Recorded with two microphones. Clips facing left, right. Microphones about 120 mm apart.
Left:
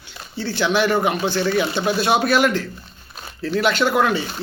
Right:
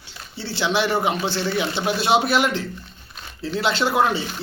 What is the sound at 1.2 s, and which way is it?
Speech, 50° left (ahead or behind).